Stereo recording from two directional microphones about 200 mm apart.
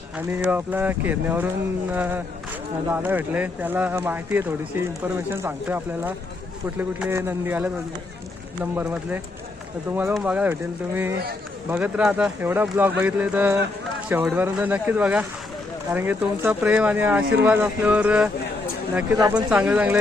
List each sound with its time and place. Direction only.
0.3 s speech: 10° right (ahead or behind)
8.7 s speech: 10° right (ahead or behind)
19.5 s speech: 5° right (ahead or behind)